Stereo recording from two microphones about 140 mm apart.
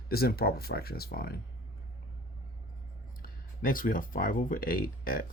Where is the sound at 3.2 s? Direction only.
85° left.